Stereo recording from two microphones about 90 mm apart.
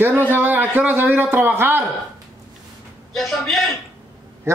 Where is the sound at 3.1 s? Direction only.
Centre (ahead or behind).